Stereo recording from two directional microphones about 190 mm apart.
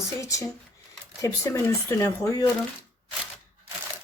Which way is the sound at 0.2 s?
15° left (ahead or behind).